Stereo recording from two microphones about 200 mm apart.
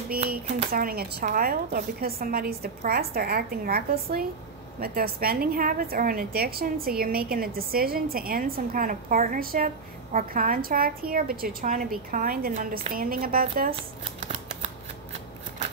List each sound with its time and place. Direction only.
0.6 s speech: 45° right (ahead or behind)